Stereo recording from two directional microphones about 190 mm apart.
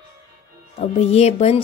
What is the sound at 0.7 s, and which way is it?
Speech, 35° left (ahead or behind).